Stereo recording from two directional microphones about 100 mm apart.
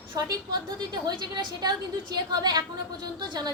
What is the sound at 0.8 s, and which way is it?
A woman's voice, 45° right (ahead or behind).